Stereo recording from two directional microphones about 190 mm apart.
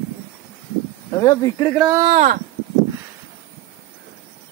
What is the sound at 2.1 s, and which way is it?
Speech, 45° right (ahead or behind).